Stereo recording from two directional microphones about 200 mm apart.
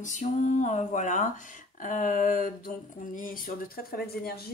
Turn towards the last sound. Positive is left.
turn(degrees=50)  # may be behind; listen again after turning